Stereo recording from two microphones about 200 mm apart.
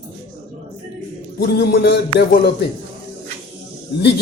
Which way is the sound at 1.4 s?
55° left (ahead or behind).